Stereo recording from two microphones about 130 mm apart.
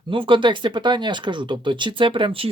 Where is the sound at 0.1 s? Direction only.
40° right (ahead or behind).